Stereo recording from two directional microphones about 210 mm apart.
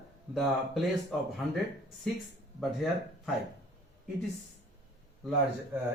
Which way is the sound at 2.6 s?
Centre (ahead or behind).